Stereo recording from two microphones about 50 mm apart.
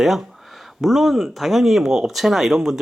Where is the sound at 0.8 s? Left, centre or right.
Centre.